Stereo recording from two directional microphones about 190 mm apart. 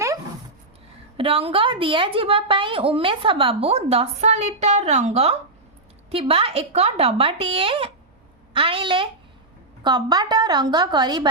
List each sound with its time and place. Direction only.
1.1 s a woman's voice: 30° right (ahead or behind)